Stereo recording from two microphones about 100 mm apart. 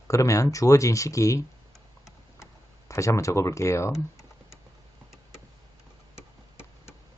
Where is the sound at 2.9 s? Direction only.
30° left (ahead or behind).